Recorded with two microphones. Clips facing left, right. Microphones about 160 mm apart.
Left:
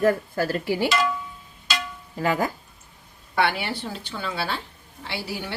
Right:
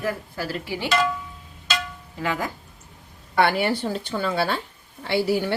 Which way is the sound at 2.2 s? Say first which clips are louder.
Left 3 dB; 40° left (ahead or behind).